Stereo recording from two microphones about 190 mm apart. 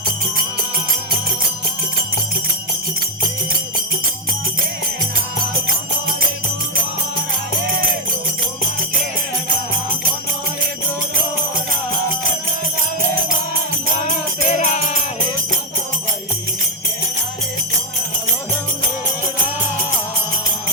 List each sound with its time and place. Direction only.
14.6 s music: 35° left (ahead or behind)